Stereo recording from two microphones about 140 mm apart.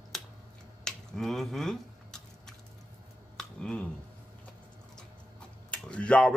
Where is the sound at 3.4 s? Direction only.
5° left (ahead or behind).